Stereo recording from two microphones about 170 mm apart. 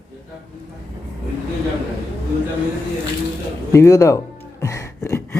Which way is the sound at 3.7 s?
20° left (ahead or behind).